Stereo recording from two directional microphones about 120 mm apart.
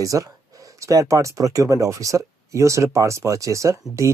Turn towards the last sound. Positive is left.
turn(degrees=-25)  # may be behind; listen again after turning